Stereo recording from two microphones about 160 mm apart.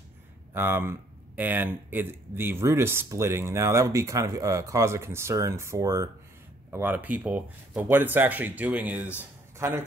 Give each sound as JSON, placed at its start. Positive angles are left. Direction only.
{"t": 0.5, "sound": "speech", "side_deg": -15}